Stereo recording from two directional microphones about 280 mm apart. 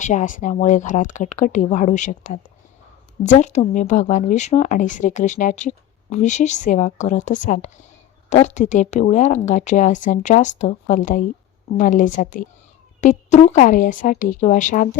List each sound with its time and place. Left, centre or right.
0.0 s speech: left